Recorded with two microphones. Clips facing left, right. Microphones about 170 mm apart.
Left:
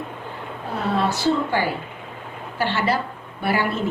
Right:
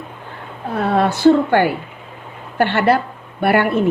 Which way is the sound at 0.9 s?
55° right (ahead or behind).